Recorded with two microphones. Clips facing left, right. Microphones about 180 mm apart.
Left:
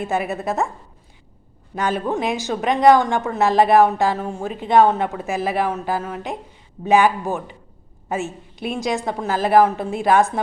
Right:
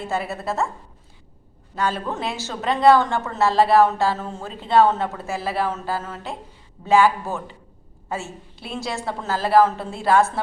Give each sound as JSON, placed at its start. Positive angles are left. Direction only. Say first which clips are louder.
{"t": 0.0, "sound": "a woman's voice", "louder": "left 4 dB", "side_deg": 15}
{"t": 1.7, "sound": "a woman's voice", "louder": "left 3 dB", "side_deg": 20}